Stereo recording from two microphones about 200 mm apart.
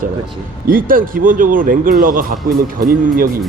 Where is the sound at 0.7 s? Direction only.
45° right (ahead or behind).